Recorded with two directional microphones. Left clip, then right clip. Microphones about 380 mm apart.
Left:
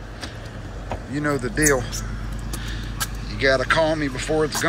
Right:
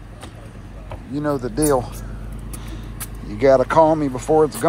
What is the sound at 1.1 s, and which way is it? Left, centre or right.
Speech, centre.